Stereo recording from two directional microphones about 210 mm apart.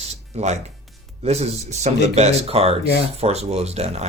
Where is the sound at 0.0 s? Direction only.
30° right (ahead or behind).